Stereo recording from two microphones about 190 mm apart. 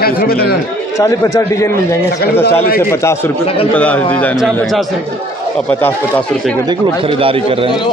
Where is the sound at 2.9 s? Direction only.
15° left (ahead or behind).